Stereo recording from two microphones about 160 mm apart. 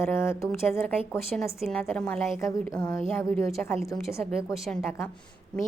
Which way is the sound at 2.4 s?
20° left (ahead or behind).